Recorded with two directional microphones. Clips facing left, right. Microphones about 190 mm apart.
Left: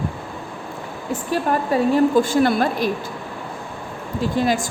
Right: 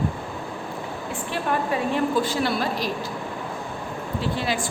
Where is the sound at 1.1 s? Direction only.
40° left (ahead or behind).